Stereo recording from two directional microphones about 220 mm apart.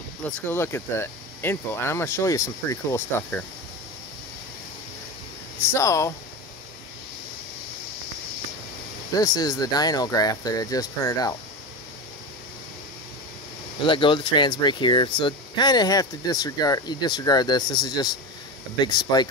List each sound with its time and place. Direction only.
0.2 s speech: 10° left (ahead or behind)
5.6 s speech: 10° left (ahead or behind)
9.1 s speech: 15° left (ahead or behind)
13.8 s speech: 20° left (ahead or behind)